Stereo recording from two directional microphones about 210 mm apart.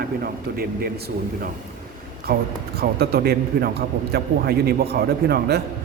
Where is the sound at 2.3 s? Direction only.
45° right (ahead or behind).